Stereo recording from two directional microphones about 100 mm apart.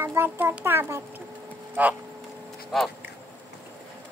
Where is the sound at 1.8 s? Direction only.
15° right (ahead or behind).